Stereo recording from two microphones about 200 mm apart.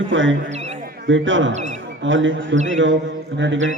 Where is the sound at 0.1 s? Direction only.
70° right (ahead or behind).